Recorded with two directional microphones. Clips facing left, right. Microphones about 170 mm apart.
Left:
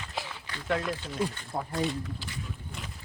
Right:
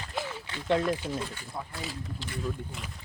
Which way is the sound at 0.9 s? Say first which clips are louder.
Right 1 dB; 10° right (ahead or behind).